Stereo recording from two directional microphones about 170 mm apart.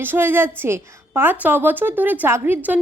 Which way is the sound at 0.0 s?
10° right (ahead or behind).